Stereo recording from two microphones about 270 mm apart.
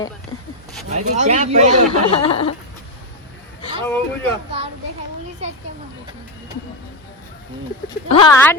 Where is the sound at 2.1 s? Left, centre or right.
Left.